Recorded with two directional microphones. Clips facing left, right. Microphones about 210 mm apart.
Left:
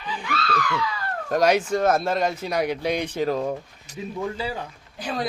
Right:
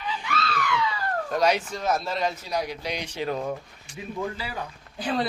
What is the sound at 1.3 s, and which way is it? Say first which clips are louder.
Speech: left 5 dB; 45° left (ahead or behind).